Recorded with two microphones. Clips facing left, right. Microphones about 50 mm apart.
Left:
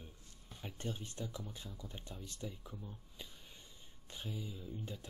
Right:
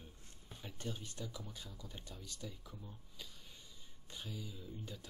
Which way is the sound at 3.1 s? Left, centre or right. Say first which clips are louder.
Left 1 dB; left.